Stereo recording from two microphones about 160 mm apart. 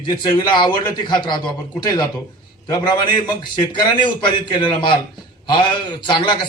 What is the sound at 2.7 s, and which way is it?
A man's voice, 25° left (ahead or behind).